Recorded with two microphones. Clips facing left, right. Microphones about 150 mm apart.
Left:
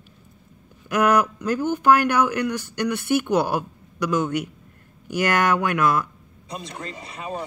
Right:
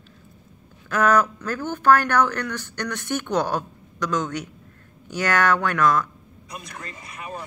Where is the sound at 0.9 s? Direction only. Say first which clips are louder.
Left 1 dB; 15° left (ahead or behind).